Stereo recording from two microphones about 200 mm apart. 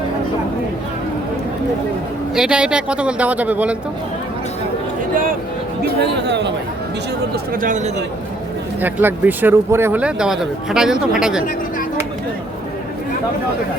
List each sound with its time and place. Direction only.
2.3 s speech: 5° right (ahead or behind)
5.8 s speech: 55° right (ahead or behind)
7.5 s speech: 40° right (ahead or behind)
8.8 s speech: 10° right (ahead or behind)